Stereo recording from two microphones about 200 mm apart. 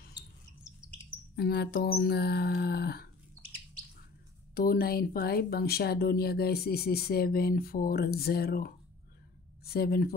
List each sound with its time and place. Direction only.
1.3 s speech: 55° left (ahead or behind)
4.6 s speech: 45° left (ahead or behind)